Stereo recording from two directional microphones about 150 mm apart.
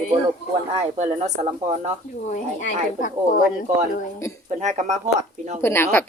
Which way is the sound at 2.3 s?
60° left (ahead or behind).